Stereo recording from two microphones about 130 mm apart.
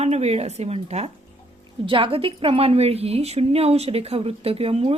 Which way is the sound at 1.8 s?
40° right (ahead or behind).